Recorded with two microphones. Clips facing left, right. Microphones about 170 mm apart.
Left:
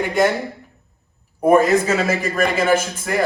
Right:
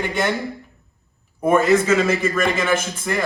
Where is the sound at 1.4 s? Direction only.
35° left (ahead or behind).